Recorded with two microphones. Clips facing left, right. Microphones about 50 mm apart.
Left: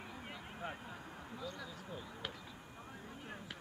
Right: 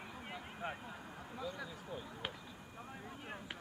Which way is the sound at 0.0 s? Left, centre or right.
Centre.